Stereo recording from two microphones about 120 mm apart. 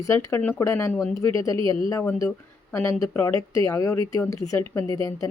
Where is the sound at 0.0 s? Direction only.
25° left (ahead or behind).